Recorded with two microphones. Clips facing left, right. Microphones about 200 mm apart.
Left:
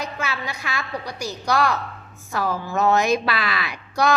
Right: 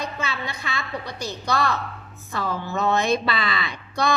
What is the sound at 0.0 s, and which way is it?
A woman's voice, 10° left (ahead or behind).